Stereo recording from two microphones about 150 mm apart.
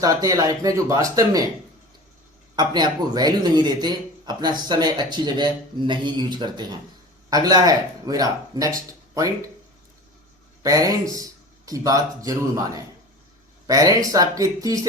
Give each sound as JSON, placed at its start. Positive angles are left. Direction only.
{"t": 0.0, "sound": "speech", "side_deg": -25}
{"t": 2.6, "sound": "speech", "side_deg": -30}
{"t": 10.6, "sound": "speech", "side_deg": -25}